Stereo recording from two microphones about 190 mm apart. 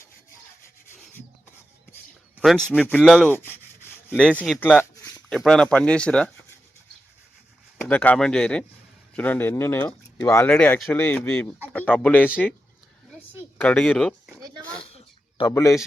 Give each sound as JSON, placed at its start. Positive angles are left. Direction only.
{"t": 2.3, "sound": "speech", "side_deg": -5}
{"t": 3.3, "sound": "rub", "side_deg": 10}
{"t": 4.3, "sound": "speech", "side_deg": 5}
{"t": 7.8, "sound": "speech", "side_deg": 10}
{"t": 13.6, "sound": "speech", "side_deg": 5}
{"t": 14.8, "sound": "a sound", "side_deg": 30}
{"t": 15.5, "sound": "speech", "side_deg": 15}